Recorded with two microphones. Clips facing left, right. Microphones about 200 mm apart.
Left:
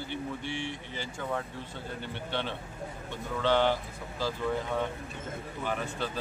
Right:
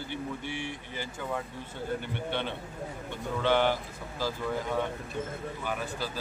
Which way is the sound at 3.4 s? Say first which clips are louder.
Even; 10° right (ahead or behind).